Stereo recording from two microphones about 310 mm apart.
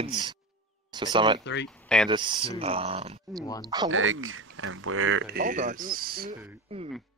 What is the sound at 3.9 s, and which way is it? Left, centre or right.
Speech, right.